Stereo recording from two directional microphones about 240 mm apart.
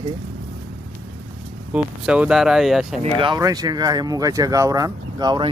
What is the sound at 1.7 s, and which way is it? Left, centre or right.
Speech, centre.